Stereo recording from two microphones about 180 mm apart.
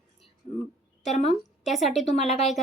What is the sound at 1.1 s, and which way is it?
Speech, 40° left (ahead or behind).